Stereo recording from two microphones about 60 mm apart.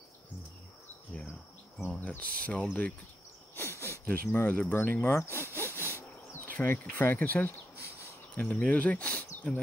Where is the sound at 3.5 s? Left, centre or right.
Left.